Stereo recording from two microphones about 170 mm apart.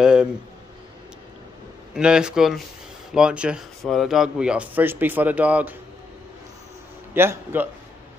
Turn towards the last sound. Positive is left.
turn(degrees=-15)  # may be behind; listen again after turning